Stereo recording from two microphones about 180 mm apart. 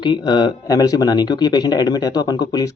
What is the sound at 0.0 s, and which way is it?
Speech, 25° left (ahead or behind).